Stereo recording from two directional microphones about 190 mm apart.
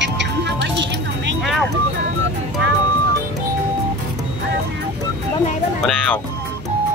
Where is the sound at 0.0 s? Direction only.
70° right (ahead or behind).